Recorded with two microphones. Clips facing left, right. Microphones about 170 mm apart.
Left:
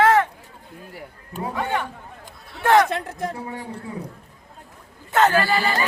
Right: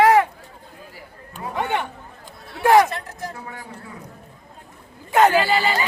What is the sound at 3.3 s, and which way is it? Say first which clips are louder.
Speech: left 4 dB; 30° left (ahead or behind).